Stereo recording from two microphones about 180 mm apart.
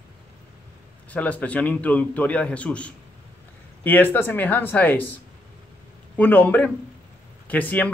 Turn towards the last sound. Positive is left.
turn(degrees=10)  # may be behind; listen again after turning